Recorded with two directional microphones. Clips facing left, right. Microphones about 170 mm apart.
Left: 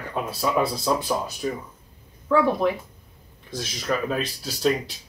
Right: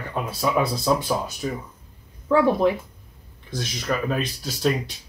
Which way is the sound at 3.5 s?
Centre (ahead or behind).